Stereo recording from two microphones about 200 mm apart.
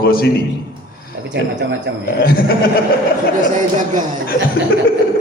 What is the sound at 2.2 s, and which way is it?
Speech, 45° left (ahead or behind).